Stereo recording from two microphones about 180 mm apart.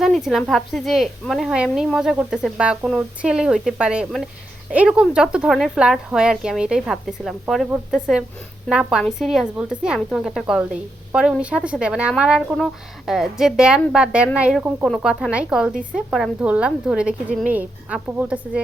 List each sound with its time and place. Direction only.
0.0 s a woman's voice: centre (ahead or behind)